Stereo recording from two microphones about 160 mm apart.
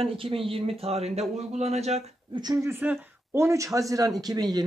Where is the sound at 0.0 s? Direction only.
35° right (ahead or behind).